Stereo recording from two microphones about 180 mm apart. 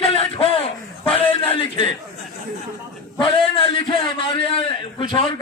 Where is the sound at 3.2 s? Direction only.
30° left (ahead or behind).